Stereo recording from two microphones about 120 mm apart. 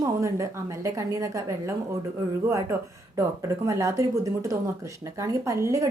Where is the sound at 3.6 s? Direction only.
25° right (ahead or behind).